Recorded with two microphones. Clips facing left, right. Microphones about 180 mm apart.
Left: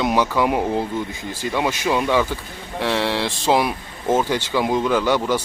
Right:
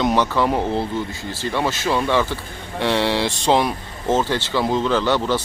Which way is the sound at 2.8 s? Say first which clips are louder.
Right 2 dB; centre (ahead or behind).